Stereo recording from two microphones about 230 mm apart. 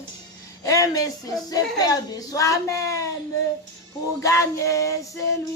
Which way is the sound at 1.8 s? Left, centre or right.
Centre.